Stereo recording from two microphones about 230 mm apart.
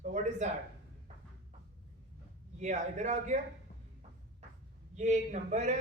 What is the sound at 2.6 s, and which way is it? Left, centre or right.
Speech, right.